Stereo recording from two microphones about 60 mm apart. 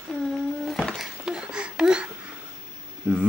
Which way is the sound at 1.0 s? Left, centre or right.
Centre.